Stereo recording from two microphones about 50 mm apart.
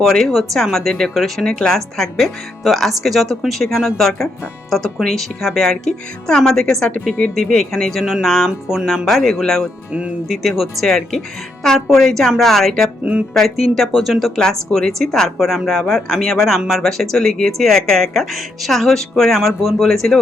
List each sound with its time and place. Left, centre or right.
0.0 s speech: centre
8.4 s speech: centre
9.0 s speech: centre
10.2 s speech: centre